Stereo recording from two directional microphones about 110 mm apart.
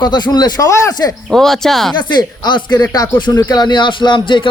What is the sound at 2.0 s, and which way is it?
Speech, 45° left (ahead or behind).